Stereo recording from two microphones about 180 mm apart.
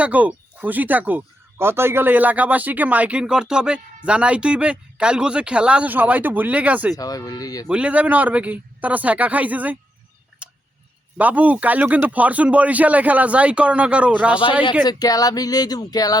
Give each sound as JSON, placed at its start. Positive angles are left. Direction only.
{"t": 0.0, "sound": "speech", "side_deg": -10}
{"t": 6.9, "sound": "speech", "side_deg": 20}
{"t": 7.7, "sound": "speech", "side_deg": -5}
{"t": 10.4, "sound": "tick", "side_deg": -5}
{"t": 11.2, "sound": "speech", "side_deg": -10}
{"t": 14.8, "sound": "speech", "side_deg": 20}